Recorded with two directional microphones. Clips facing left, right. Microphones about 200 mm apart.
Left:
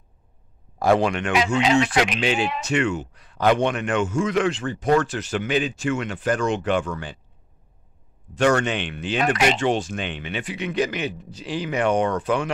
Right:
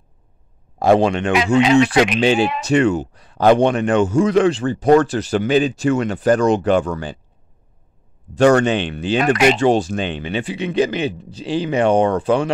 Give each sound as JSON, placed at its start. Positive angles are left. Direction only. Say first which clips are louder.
{"t": 0.7, "sound": "speech", "louder": "right 5 dB", "side_deg": -25}
{"t": 1.3, "sound": "speech", "louder": "right 7 dB", "side_deg": -60}
{"t": 2.1, "sound": "a man's voice", "louder": "right 7 dB", "side_deg": -30}
{"t": 8.4, "sound": "a man's voice", "louder": "right 7 dB", "side_deg": -35}